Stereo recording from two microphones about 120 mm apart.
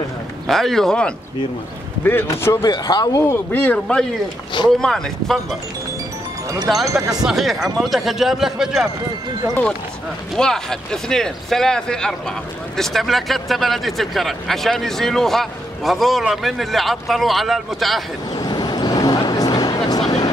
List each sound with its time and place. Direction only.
0.5 s speech: centre (ahead or behind)
2.0 s a man's voice: 20° left (ahead or behind)
2.7 s a man's voice: 35° left (ahead or behind); by 5.6 s 5° left (ahead or behind)
6.9 s speech: 25° right (ahead or behind)
7.2 s speech: centre (ahead or behind)
10.3 s speech: 5° left (ahead or behind)
18.3 s vehicle: 35° left (ahead or behind)